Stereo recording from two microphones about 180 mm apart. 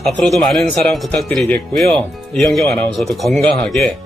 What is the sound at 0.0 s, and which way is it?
Speech, centre (ahead or behind).